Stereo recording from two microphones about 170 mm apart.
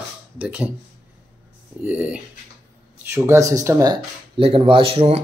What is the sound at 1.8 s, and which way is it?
Speech, 10° right (ahead or behind).